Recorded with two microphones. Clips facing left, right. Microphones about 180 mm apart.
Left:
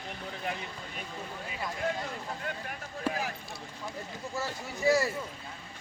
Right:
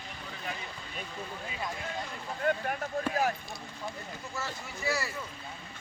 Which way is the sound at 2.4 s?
50° right (ahead or behind).